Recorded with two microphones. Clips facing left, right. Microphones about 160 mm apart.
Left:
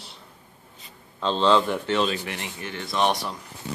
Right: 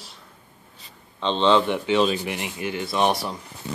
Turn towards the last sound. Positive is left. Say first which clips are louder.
# right 2 dB
turn(degrees=-5)  # may be behind; listen again after turning